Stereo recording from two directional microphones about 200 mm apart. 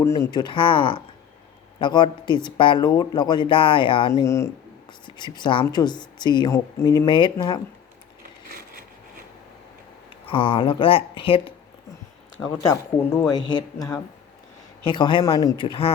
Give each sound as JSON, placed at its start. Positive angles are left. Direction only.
{"t": 0.0, "sound": "speech", "side_deg": 15}
{"t": 10.1, "sound": "speech", "side_deg": 25}
{"t": 12.6, "sound": "speech", "side_deg": 10}
{"t": 13.3, "sound": "speech", "side_deg": 20}